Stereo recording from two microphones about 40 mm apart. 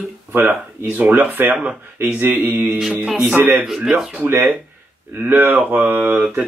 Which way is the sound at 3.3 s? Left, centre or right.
Right.